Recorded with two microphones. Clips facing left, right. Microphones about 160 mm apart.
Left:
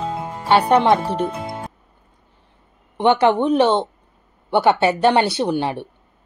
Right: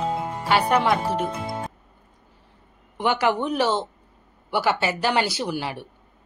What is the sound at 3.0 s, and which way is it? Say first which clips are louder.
Speech: left 7 dB; 25° left (ahead or behind).